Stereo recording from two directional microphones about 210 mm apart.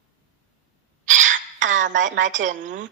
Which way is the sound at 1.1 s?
35° right (ahead or behind).